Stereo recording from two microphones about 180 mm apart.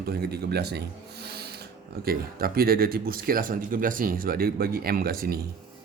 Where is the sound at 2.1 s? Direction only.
55° right (ahead or behind).